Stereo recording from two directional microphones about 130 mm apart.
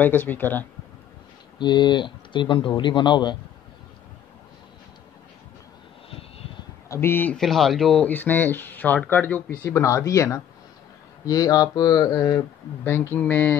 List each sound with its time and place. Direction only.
0.0 s speech: 15° left (ahead or behind)
1.6 s speech: 35° left (ahead or behind)
6.9 s speech: 20° left (ahead or behind)
7.3 s speech: centre (ahead or behind)